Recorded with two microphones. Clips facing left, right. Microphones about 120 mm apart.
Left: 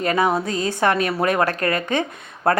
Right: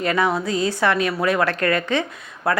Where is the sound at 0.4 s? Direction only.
45° left (ahead or behind).